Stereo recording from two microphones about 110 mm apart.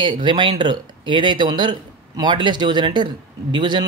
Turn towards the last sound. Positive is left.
turn(degrees=-45)  # may be behind; listen again after turning